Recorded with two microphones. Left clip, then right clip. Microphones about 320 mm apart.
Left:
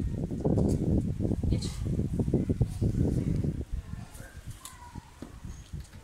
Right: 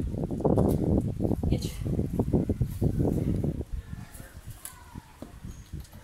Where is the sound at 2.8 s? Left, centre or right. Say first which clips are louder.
Right 6 dB; right.